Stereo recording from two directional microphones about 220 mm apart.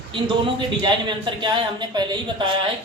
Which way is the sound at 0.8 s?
20° right (ahead or behind).